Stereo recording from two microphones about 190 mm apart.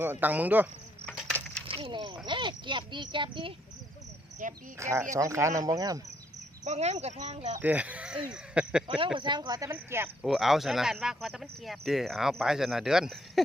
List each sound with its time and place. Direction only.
0.0 s speech: 10° right (ahead or behind)
1.0 s a sound: 5° left (ahead or behind)
1.6 s a sound: 30° right (ahead or behind)
2.2 s a child's voice: 25° right (ahead or behind)
4.4 s speech: 45° right (ahead or behind)
4.8 s speech: 15° right (ahead or behind)
6.7 s speech: 35° right (ahead or behind)
7.6 s speech: 10° right (ahead or behind)
9.1 s a child's voice: 25° right (ahead or behind)
10.2 s speech: centre (ahead or behind)